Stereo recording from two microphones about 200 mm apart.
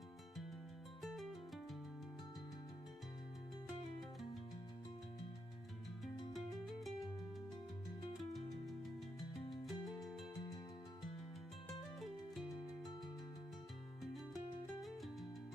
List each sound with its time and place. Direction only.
1.0 s music: centre (ahead or behind)
6.3 s music: centre (ahead or behind)
8.2 s music: centre (ahead or behind)
14.8 s music: centre (ahead or behind)